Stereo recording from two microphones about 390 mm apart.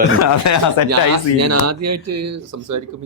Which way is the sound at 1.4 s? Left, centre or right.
Right.